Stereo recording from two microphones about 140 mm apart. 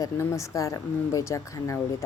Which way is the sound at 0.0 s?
20° left (ahead or behind).